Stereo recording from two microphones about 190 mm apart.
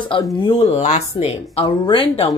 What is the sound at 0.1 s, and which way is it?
A woman's voice, 25° left (ahead or behind).